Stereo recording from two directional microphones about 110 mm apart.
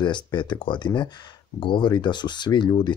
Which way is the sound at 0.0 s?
45° left (ahead or behind).